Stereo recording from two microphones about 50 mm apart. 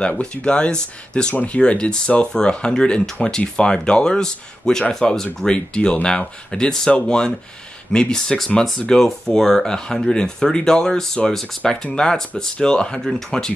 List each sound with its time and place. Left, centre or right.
0.2 s speech: centre
1.3 s speech: left
1.6 s speech: centre
5.5 s speech: centre